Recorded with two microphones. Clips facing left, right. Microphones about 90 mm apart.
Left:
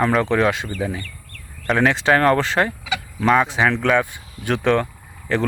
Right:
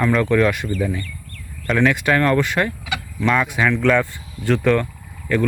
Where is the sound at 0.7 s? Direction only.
20° left (ahead or behind).